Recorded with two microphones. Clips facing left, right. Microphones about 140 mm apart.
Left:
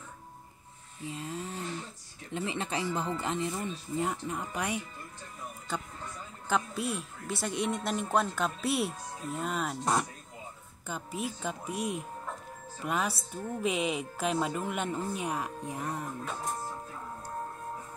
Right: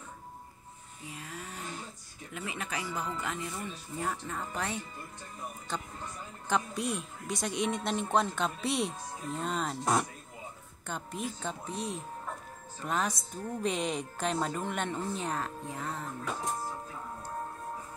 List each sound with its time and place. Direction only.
1.0 s a sound: 25° left (ahead or behind)
2.3 s speech: 30° left (ahead or behind); by 4.8 s 15° left (ahead or behind)
6.5 s speech: 5° left (ahead or behind)